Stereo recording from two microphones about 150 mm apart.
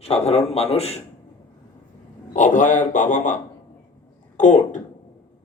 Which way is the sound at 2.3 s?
55° left (ahead or behind).